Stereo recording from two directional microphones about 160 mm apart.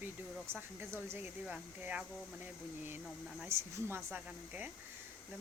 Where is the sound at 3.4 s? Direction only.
15° right (ahead or behind).